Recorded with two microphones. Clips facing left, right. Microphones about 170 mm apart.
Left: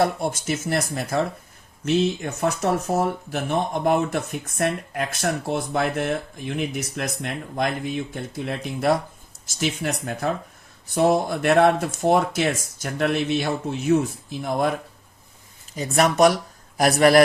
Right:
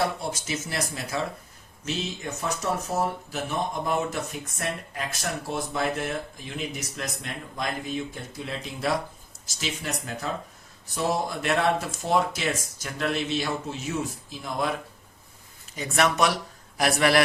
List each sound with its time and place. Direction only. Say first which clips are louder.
0.0 s speech: left 6 dB; 55° left (ahead or behind)
15.7 s speech: left 4 dB; 40° left (ahead or behind)